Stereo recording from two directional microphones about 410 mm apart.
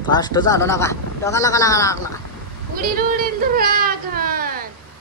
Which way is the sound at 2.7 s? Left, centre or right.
Right.